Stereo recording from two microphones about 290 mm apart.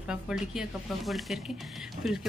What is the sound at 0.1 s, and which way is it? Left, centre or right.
Speech, centre.